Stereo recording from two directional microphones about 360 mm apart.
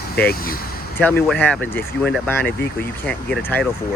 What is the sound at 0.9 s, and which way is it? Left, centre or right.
Speech, centre.